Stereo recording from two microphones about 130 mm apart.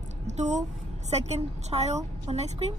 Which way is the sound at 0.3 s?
60° right (ahead or behind).